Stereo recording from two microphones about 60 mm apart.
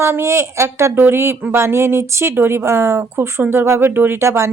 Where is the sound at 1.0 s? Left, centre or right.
Right.